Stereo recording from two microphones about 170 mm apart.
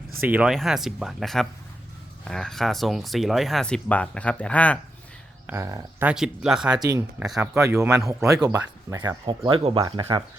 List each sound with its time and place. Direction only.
0.3 s speech: 5° right (ahead or behind)
5.5 s speech: 15° right (ahead or behind)
6.1 s speech: 5° right (ahead or behind)
6.7 s speech: 20° right (ahead or behind)
7.2 s speech: centre (ahead or behind)
7.5 s speech: 15° right (ahead or behind)